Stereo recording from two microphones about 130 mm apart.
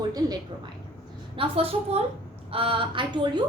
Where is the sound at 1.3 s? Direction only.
45° right (ahead or behind).